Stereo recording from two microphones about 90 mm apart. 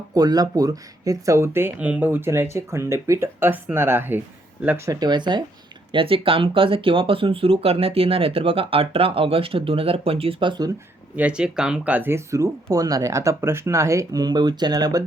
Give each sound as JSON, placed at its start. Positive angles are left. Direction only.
{"t": 0.1, "sound": "speech", "side_deg": -45}
{"t": 4.9, "sound": "speech", "side_deg": -50}
{"t": 5.9, "sound": "speech", "side_deg": -80}
{"t": 11.2, "sound": "speech", "side_deg": -10}